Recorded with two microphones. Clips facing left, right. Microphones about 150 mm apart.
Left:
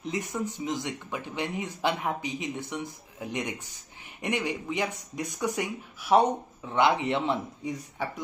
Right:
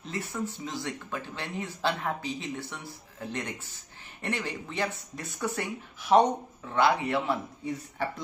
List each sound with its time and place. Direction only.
0.0 s speech: 15° left (ahead or behind)
6.7 s speech: 20° left (ahead or behind)